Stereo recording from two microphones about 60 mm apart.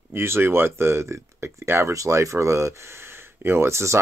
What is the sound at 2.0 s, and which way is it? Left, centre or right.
Speech, right.